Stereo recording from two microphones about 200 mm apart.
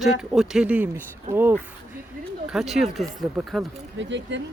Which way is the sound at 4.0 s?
65° right (ahead or behind).